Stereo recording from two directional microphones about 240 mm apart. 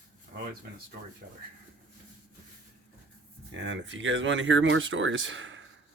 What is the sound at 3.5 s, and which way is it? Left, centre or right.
Speech, right.